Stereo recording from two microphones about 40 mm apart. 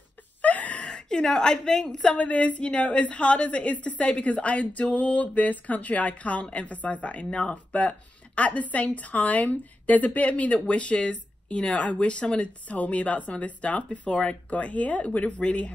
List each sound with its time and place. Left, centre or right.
0.4 s gasp: left
1.2 s a woman's voice: centre
2.0 s a woman's voice: left